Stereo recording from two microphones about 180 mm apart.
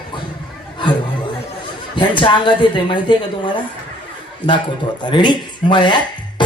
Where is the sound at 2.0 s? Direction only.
25° left (ahead or behind).